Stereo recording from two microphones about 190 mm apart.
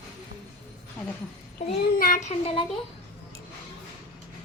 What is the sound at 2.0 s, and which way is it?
Speech, 45° left (ahead or behind).